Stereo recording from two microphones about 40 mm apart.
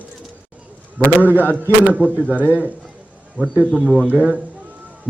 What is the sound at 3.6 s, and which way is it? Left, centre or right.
Speech, centre.